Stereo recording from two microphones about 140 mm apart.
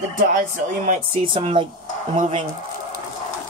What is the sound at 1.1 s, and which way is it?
Speech, 35° right (ahead or behind).